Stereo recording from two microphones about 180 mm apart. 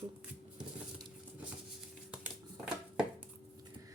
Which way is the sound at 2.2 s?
5° right (ahead or behind).